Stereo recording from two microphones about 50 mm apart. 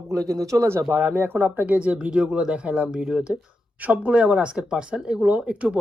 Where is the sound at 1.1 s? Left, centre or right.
Right; by 3.2 s centre.